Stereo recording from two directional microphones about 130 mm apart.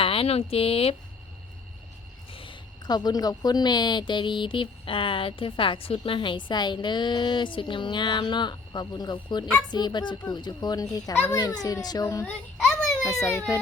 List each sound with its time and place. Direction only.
0.0 s speech: 45° left (ahead or behind)
2.3 s speech: 40° left (ahead or behind)
12.7 s a sound: 25° left (ahead or behind)